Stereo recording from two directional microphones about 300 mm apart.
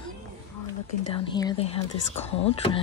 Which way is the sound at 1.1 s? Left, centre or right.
Centre.